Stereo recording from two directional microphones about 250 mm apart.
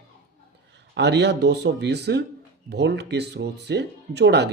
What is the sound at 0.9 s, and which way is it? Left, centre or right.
Speech, right.